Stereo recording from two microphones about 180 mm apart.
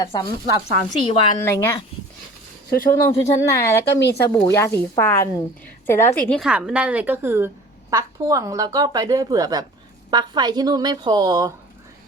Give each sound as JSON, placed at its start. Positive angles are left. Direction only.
{"t": 0.0, "sound": "speech", "side_deg": 25}
{"t": 1.5, "sound": "speech", "side_deg": 15}
{"t": 2.6, "sound": "speech", "side_deg": 50}
{"t": 2.9, "sound": "speech", "side_deg": 15}
{"t": 6.4, "sound": "a woman's voice", "side_deg": -5}